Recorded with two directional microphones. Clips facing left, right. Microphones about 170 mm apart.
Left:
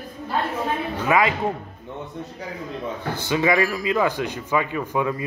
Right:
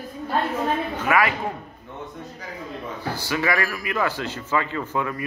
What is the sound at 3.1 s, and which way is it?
Speech, 20° left (ahead or behind).